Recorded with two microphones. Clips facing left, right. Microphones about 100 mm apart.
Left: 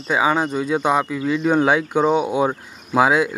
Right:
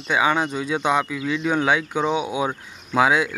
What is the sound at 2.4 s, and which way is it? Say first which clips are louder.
Speech: left 5 dB; 5° left (ahead or behind).